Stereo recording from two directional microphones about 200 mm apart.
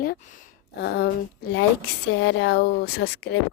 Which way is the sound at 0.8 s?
60° left (ahead or behind).